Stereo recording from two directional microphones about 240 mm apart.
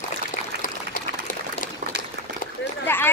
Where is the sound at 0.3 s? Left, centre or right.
Left.